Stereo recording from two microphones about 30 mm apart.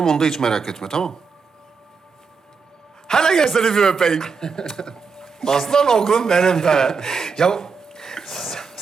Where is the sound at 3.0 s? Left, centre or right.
Centre.